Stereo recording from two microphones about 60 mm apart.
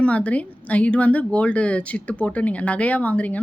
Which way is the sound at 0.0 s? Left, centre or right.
Left.